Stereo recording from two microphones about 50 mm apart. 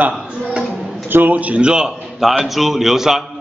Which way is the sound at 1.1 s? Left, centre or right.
Right.